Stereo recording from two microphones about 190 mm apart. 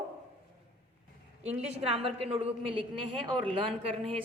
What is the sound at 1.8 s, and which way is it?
A woman's voice, 30° right (ahead or behind).